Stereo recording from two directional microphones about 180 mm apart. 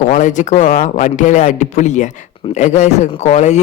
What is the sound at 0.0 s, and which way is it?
A man's voice, 45° left (ahead or behind).